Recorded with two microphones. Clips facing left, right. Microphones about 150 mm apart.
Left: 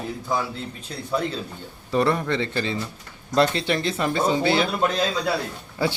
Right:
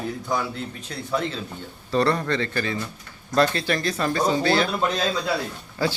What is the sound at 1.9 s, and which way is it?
A man's voice, 15° left (ahead or behind).